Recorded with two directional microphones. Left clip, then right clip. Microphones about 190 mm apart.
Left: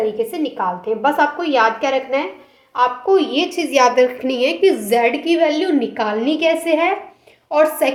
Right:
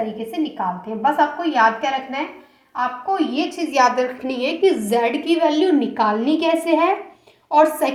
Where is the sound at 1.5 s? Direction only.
45° left (ahead or behind).